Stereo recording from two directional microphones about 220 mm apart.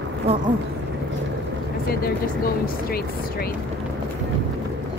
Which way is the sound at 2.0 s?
40° left (ahead or behind).